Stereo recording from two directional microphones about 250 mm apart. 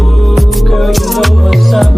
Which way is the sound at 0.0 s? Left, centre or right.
Centre.